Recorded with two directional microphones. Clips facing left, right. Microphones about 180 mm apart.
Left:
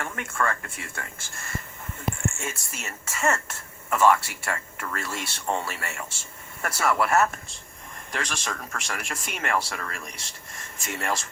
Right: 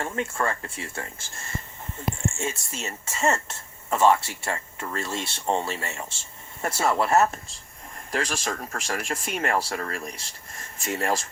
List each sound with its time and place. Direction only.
0.0 s speech: 25° right (ahead or behind)